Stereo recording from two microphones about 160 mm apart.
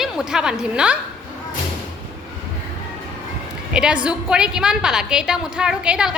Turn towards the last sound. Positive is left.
turn(degrees=-5)  # may be behind; listen again after turning